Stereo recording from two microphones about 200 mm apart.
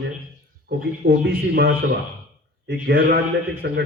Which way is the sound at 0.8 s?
50° right (ahead or behind).